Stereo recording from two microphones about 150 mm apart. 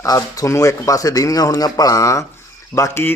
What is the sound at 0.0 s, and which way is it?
A man's voice, 25° left (ahead or behind).